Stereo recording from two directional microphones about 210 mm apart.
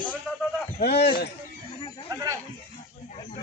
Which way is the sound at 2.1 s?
15° right (ahead or behind).